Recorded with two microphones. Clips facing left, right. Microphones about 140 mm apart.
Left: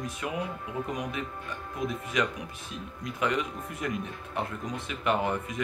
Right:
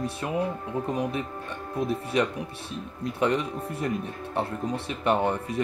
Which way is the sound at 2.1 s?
35° right (ahead or behind).